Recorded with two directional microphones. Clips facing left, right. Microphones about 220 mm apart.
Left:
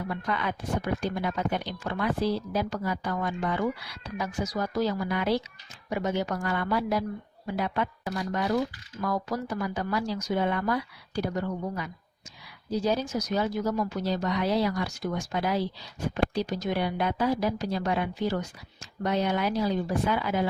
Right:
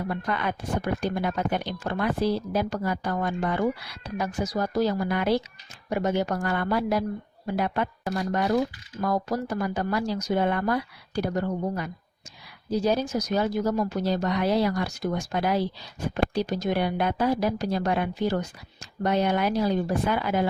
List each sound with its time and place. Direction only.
0.1 s speech: 50° right (ahead or behind)
14.0 s speech: 55° right (ahead or behind)